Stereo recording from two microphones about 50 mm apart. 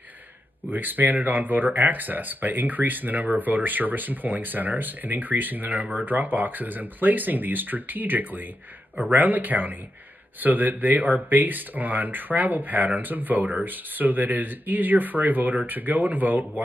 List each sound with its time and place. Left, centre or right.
0.7 s speech: right